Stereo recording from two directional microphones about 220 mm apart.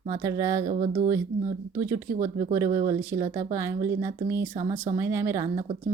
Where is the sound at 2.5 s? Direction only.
15° right (ahead or behind).